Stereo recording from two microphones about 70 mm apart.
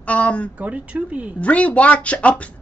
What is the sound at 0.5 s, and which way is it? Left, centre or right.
Female singing, centre.